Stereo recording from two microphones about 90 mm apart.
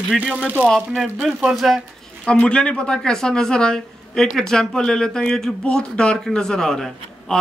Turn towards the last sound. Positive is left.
turn(degrees=5)  # may be behind; listen again after turning